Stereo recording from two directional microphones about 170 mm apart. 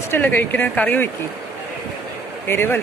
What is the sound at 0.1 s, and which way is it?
Speech, 10° left (ahead or behind).